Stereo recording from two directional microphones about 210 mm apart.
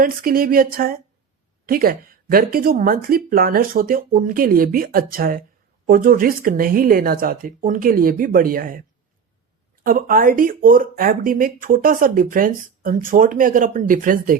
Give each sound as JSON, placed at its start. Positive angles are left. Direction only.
{"t": 0.0, "sound": "speech", "side_deg": -45}
{"t": 9.8, "sound": "speech", "side_deg": -40}